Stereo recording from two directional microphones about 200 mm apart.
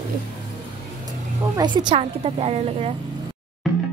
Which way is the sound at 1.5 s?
20° right (ahead or behind).